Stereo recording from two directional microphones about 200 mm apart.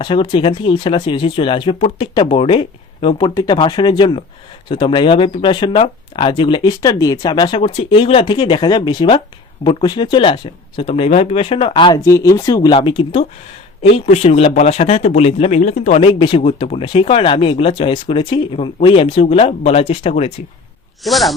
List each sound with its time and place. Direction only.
0.0 s speech: 25° left (ahead or behind)
21.0 s speech: centre (ahead or behind)